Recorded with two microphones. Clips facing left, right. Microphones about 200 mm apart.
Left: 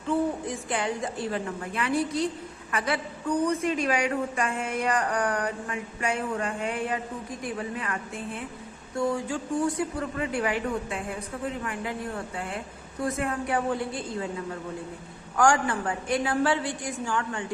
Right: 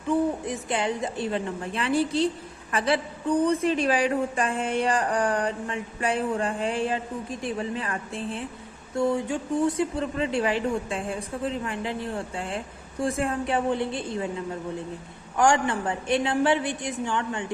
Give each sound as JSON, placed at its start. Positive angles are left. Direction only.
{"t": 0.1, "sound": "speech", "side_deg": -25}
{"t": 15.4, "sound": "speech", "side_deg": -25}